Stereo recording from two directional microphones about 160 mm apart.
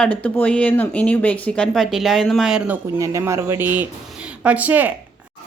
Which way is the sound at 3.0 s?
20° right (ahead or behind).